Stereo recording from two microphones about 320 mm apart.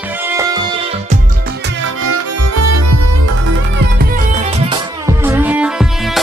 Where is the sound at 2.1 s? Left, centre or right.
Right.